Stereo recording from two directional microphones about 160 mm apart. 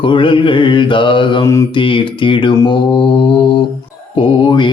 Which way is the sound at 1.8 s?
30° left (ahead or behind).